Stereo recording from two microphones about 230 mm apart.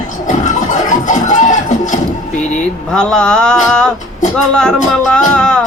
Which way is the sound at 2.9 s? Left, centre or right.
Centre.